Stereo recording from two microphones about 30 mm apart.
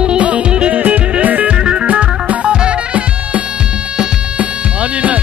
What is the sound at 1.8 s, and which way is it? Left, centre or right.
Music, right.